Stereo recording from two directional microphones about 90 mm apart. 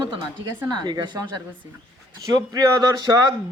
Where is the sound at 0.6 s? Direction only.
50° right (ahead or behind).